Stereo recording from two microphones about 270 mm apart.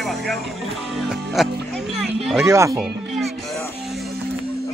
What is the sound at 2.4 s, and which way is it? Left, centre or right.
Speech, centre.